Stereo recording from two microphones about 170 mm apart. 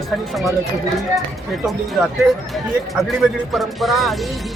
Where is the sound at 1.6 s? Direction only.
Centre (ahead or behind).